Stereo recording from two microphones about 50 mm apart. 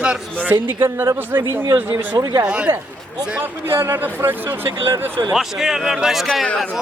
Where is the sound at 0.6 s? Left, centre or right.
Right.